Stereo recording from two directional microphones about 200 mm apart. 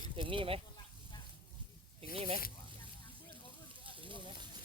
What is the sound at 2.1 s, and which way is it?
Speech, 25° right (ahead or behind).